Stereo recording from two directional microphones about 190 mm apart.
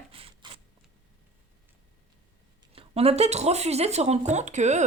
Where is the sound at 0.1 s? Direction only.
30° right (ahead or behind).